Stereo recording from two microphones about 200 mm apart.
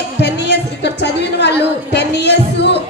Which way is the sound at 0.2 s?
60° left (ahead or behind).